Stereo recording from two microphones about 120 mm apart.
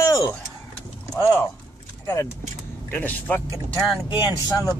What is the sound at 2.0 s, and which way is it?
Speech, 20° left (ahead or behind).